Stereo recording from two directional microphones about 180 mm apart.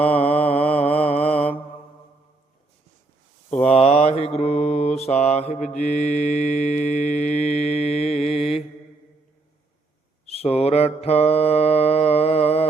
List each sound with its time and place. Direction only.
0.0 s mantra: 35° left (ahead or behind)
3.7 s mantra: 35° left (ahead or behind)
10.2 s mantra: 35° left (ahead or behind)